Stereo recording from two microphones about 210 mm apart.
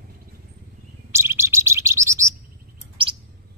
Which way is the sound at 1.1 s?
10° right (ahead or behind).